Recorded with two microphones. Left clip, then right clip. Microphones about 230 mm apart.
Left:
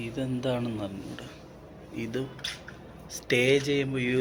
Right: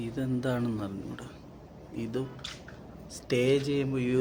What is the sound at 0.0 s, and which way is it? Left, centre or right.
A man's voice, centre.